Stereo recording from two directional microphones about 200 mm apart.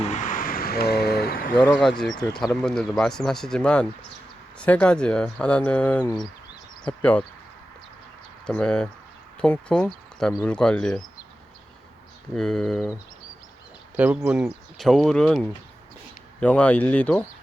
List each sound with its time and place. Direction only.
0.0 s vehicle: 35° left (ahead or behind)
2.1 s speech: 20° left (ahead or behind)
2.6 s speech: 5° left (ahead or behind)
8.4 s speech: 5° left (ahead or behind)
12.3 s speech: centre (ahead or behind)